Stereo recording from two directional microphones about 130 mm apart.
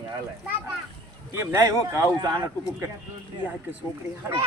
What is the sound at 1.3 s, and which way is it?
Speech, 20° right (ahead or behind).